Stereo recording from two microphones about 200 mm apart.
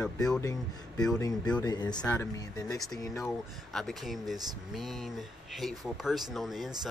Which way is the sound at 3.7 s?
Centre (ahead or behind).